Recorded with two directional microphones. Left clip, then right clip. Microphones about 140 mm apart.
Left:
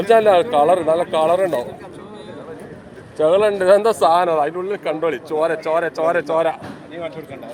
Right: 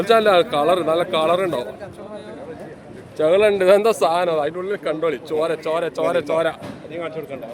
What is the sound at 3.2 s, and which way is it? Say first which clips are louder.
Speech: even; 30° right (ahead or behind).